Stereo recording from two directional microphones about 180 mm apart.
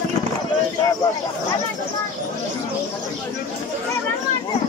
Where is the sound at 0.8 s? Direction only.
20° left (ahead or behind).